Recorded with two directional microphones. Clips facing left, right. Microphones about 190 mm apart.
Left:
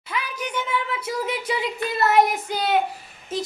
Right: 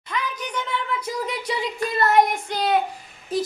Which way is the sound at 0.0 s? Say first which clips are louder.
Even; 5° left (ahead or behind).